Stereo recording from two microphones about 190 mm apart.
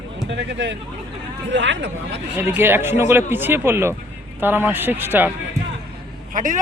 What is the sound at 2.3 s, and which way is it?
Speech, 10° right (ahead or behind).